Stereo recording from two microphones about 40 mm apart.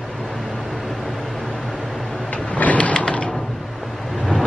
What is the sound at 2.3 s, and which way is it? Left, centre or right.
Vehicle, left.